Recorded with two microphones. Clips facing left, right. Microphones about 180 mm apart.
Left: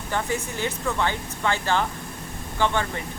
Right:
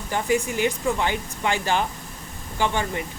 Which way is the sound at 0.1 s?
15° right (ahead or behind).